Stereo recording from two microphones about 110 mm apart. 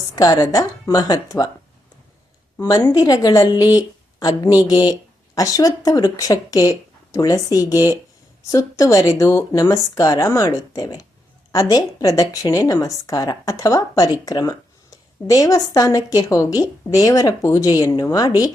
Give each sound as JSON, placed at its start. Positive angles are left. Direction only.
{"t": 0.2, "sound": "a woman's voice", "side_deg": 35}
{"t": 2.6, "sound": "a woman's voice", "side_deg": 30}